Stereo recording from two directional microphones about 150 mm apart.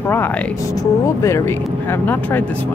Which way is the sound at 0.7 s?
20° left (ahead or behind).